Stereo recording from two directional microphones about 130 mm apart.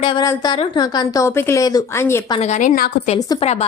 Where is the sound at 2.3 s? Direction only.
65° left (ahead or behind); by 3.1 s 85° left.